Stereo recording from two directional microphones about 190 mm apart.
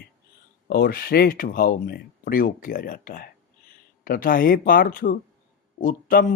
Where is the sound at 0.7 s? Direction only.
55° left (ahead or behind).